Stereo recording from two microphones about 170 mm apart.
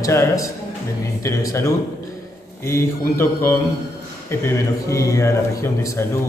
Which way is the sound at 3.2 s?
15° left (ahead or behind).